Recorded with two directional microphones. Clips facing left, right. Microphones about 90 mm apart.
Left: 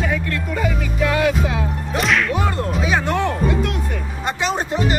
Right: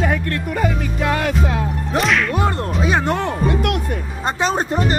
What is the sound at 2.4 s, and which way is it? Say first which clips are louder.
Speech: right 1 dB; 40° right (ahead or behind).